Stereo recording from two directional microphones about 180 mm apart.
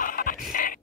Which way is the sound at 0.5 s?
50° left (ahead or behind).